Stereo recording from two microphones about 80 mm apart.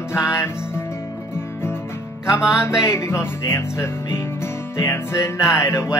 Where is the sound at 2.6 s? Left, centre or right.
Left.